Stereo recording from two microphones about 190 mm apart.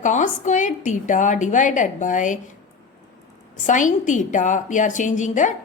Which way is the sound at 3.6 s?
40° left (ahead or behind).